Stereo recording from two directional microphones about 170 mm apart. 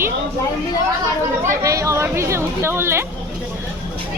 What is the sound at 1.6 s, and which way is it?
Speech, 20° right (ahead or behind).